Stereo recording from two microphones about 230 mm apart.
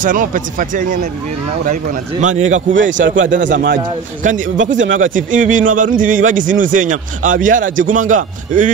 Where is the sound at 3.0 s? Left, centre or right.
Right.